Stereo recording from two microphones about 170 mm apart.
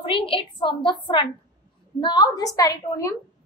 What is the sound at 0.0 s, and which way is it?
Speech, 30° left (ahead or behind).